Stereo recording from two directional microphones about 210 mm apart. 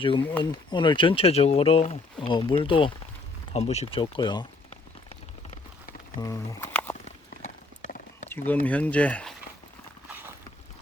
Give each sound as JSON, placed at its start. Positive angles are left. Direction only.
{"t": 0.0, "sound": "speech", "side_deg": 25}
{"t": 3.5, "sound": "a sound", "side_deg": 30}
{"t": 6.1, "sound": "speech", "side_deg": 15}
{"t": 7.0, "sound": "clip-clop", "side_deg": 35}
{"t": 8.3, "sound": "speech", "side_deg": 10}